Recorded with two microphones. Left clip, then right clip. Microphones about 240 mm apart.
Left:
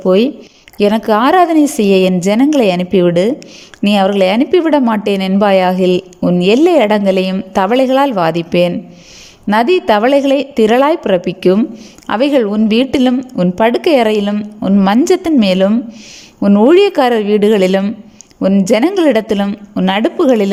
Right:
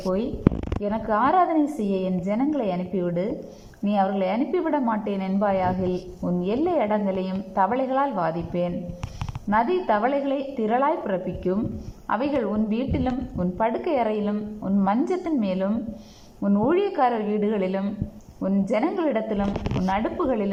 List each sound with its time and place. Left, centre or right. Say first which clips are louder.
0.0 s a woman's voice: left 13 dB; left
18.3 s a woman's voice: left 13 dB; left